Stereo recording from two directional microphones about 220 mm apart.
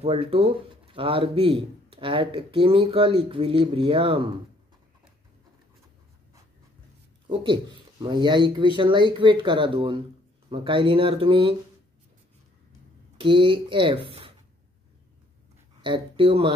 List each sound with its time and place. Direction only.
0.0 s speech: 25° right (ahead or behind)
8.0 s speech: 20° right (ahead or behind)
13.2 s speech: 20° right (ahead or behind)
15.8 s speech: 20° right (ahead or behind)